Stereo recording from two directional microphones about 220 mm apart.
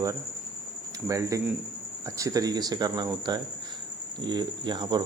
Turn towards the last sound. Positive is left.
turn(degrees=-20)  # may be behind; listen again after turning